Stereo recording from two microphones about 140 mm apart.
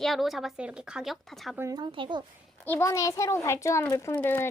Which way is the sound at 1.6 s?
25° right (ahead or behind).